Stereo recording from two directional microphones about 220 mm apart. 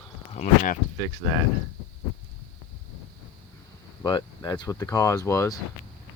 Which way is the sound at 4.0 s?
20° left (ahead or behind).